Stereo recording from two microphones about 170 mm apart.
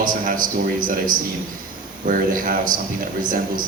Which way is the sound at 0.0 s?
55° right (ahead or behind).